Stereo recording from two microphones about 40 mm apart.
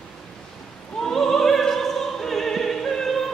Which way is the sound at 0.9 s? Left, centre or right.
Centre.